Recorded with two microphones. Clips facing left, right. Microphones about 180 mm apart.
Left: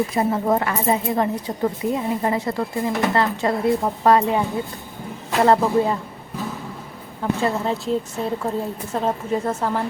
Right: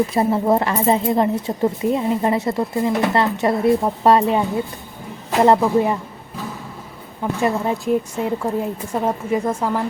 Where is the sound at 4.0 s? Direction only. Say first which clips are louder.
Even; 20° right (ahead or behind).